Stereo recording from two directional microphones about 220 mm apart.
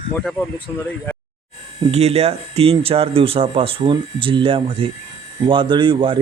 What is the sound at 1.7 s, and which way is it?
Speech, 25° right (ahead or behind).